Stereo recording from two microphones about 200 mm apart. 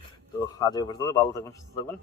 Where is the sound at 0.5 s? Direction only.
20° left (ahead or behind).